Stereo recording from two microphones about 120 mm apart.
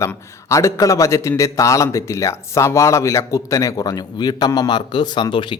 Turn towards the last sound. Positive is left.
turn(degrees=40)  # may be behind; listen again after turning